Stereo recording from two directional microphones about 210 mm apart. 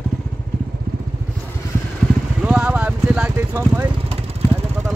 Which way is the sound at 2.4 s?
5° right (ahead or behind).